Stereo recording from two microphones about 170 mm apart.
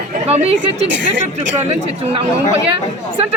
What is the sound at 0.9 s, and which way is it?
Speech, 90° right.